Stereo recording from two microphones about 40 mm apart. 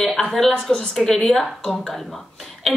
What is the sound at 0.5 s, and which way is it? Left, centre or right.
Speech, centre.